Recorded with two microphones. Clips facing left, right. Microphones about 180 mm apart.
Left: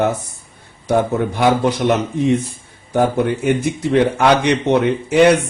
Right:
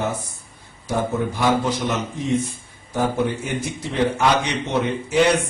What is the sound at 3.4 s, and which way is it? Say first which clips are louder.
A man's voice: left 10 dB; 65° left (ahead or behind).